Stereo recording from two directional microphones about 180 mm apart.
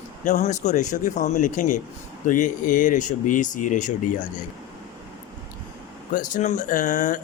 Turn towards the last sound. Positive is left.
turn(degrees=45)  # may be behind; listen again after turning